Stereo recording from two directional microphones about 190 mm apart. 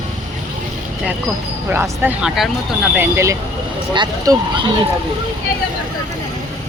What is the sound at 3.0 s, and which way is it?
Speech, 15° right (ahead or behind).